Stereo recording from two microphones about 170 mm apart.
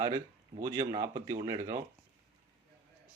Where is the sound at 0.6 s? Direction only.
20° right (ahead or behind).